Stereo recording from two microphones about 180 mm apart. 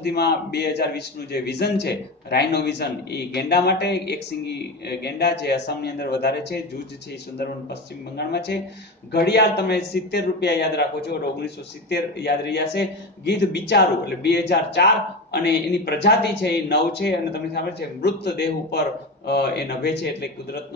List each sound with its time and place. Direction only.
0.0 s a man's voice: 65° left (ahead or behind)
8.2 s a man's voice: 65° left (ahead or behind)